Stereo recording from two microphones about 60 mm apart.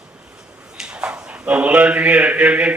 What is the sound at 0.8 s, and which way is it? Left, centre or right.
A man's voice, centre.